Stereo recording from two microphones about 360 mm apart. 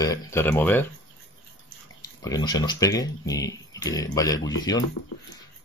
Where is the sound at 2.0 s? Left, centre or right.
Centre.